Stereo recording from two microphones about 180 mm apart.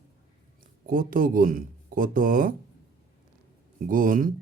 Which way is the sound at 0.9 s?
50° right (ahead or behind).